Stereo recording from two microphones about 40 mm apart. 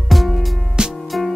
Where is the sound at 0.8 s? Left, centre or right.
Right.